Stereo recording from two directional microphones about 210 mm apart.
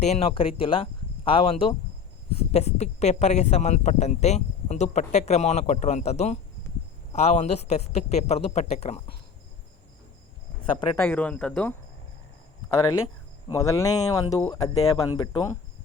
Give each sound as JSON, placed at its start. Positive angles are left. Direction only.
{"t": 0.0, "sound": "speech", "side_deg": 30}
{"t": 10.8, "sound": "speech", "side_deg": 10}
{"t": 13.5, "sound": "speech", "side_deg": 15}